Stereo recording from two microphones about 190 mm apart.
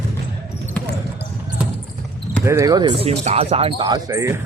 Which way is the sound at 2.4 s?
15° right (ahead or behind).